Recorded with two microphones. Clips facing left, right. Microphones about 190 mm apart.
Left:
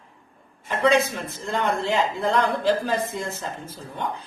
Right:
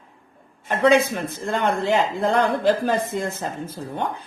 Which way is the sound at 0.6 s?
55° right (ahead or behind).